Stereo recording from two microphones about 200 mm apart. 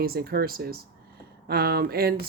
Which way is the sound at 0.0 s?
50° right (ahead or behind).